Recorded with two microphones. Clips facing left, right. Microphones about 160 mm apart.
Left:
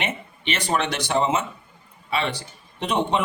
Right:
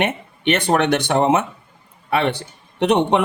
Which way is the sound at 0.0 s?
60° right (ahead or behind).